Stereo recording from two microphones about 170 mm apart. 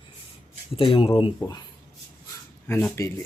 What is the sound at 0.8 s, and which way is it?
Speech, 35° left (ahead or behind).